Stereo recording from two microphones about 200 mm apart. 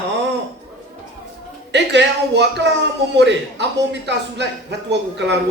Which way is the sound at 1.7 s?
60° right (ahead or behind).